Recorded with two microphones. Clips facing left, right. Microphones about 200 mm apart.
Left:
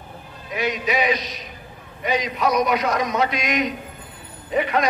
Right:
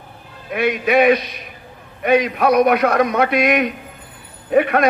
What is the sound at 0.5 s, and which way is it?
A man's voice, 60° right (ahead or behind).